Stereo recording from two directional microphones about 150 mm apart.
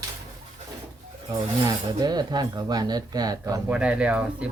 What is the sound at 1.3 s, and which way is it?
Speech, 25° right (ahead or behind).